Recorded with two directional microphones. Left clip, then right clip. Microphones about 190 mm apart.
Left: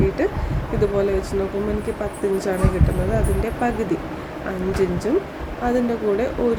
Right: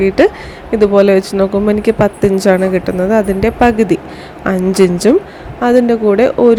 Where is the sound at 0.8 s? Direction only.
45° right (ahead or behind).